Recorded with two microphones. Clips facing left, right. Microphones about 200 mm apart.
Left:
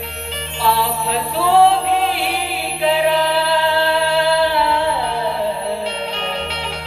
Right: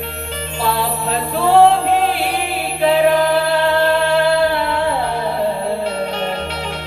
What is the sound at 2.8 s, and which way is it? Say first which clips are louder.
Music: right 3 dB; 45° right (ahead or behind).